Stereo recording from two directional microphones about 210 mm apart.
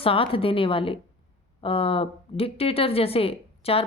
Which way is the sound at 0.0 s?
25° left (ahead or behind).